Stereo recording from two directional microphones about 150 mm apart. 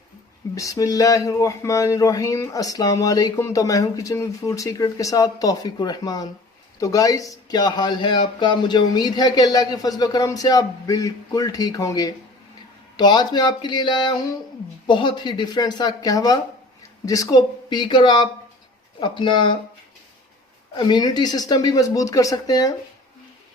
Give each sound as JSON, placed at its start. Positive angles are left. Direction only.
{"t": 0.5, "sound": "speech", "side_deg": 20}
{"t": 20.7, "sound": "speech", "side_deg": 30}